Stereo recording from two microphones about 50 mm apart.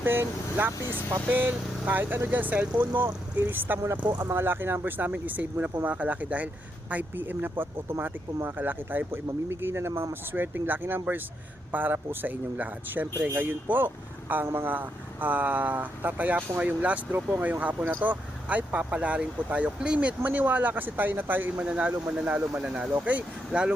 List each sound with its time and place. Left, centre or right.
0.0 s speech: right
4.2 s speech: right
4.4 s speech: right
8.5 s speech: right
10.3 s speech: right
20.2 s speech: right
21.6 s speech: right
22.3 s speech: right
22.6 s speech: right